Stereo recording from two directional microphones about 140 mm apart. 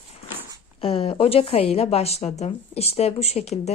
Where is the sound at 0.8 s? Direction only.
45° left (ahead or behind).